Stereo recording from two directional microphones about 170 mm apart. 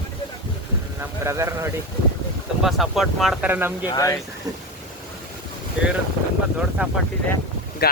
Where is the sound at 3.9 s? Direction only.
20° left (ahead or behind).